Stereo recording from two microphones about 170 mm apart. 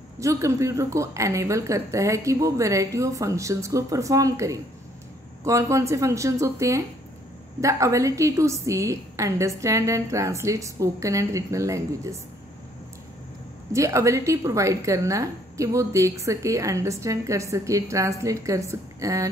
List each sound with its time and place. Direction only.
0.2 s a woman's voice: 20° right (ahead or behind)
13.7 s a woman's voice: 15° right (ahead or behind)